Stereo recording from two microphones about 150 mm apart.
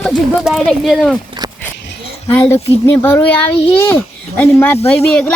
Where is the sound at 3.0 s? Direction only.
15° left (ahead or behind).